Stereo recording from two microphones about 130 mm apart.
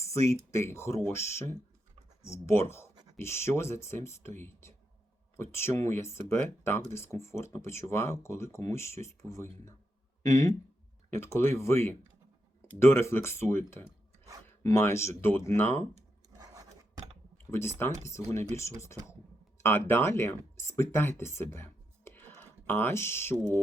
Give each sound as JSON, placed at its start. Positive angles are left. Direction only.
{"t": 0.0, "sound": "speech", "side_deg": 25}
{"t": 17.5, "sound": "speech", "side_deg": 20}
{"t": 19.6, "sound": "speech", "side_deg": 20}